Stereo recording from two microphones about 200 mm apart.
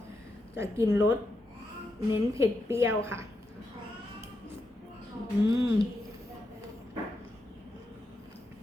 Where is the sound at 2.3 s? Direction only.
15° right (ahead or behind).